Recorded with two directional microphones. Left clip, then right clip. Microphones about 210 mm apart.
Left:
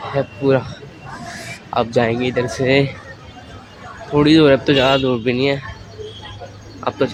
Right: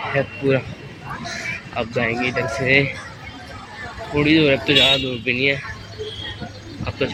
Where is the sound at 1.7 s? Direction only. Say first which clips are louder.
Left 6 dB; 25° left (ahead or behind).